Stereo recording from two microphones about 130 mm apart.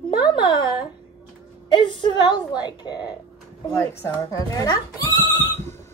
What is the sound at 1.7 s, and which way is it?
A woman's voice, 35° left (ahead or behind).